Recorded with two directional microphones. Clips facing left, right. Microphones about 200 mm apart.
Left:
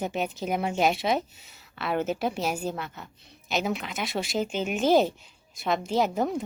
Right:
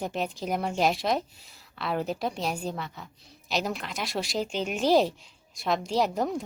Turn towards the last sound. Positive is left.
turn(degrees=0)  # may be behind; listen again after turning